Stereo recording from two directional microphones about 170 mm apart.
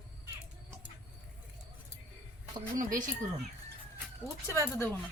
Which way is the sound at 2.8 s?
50° right (ahead or behind).